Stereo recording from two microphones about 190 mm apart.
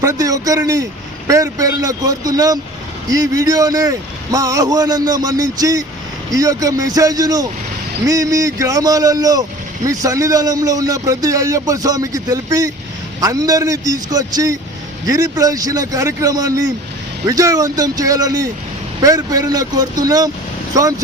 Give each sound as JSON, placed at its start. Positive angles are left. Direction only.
{"t": 0.0, "sound": "a man's voice", "side_deg": -15}